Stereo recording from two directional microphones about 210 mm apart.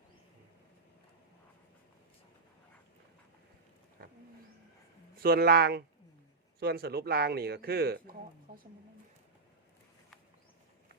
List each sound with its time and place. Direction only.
4.0 s vehicle: 40° right (ahead or behind)
5.2 s speech: 45° right (ahead or behind)